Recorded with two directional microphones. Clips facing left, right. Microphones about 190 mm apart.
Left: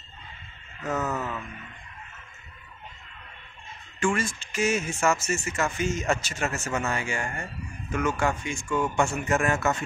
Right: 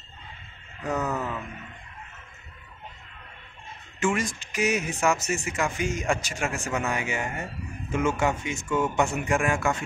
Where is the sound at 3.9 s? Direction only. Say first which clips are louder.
Even; 20° right (ahead or behind).